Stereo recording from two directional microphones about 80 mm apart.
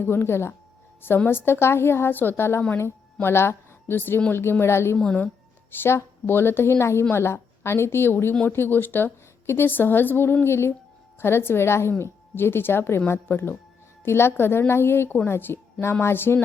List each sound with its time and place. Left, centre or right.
0.0 s a woman's voice: left